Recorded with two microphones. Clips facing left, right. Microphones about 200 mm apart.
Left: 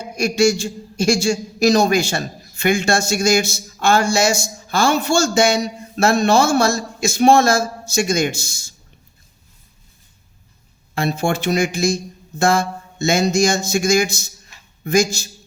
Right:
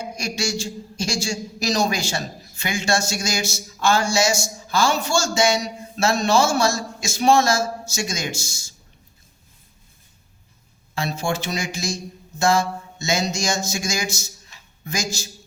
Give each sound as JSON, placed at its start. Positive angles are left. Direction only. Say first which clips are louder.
{"t": 0.0, "sound": "a man's voice", "louder": "left 11 dB", "side_deg": 55}
{"t": 10.9, "sound": "a man's voice", "louder": "left 5 dB", "side_deg": 55}